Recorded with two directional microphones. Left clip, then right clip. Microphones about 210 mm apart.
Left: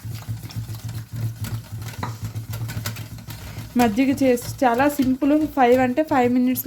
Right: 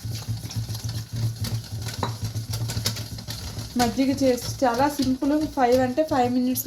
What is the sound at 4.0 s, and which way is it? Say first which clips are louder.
Speech: left 3 dB; 60° left (ahead or behind).